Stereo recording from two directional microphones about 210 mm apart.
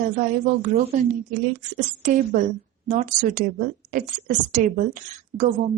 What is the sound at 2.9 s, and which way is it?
A woman's voice, 35° right (ahead or behind).